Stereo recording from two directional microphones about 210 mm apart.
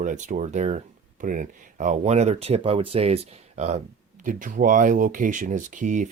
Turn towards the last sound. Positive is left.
turn(degrees=-35)  # may be behind; listen again after turning